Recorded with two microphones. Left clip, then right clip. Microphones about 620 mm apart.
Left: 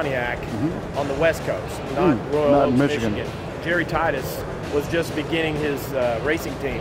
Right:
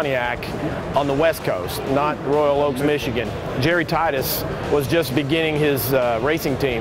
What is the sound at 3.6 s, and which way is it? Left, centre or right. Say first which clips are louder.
Speech: right 2 dB; right.